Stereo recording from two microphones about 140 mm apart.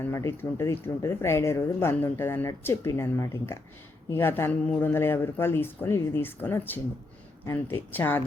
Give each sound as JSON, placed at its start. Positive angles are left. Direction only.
{"t": 0.0, "sound": "speech", "side_deg": 20}